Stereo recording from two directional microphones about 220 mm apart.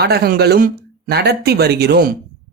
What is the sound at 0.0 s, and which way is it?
Speech, 45° right (ahead or behind).